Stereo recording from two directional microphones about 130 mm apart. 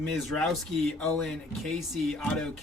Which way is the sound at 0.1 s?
5° left (ahead or behind).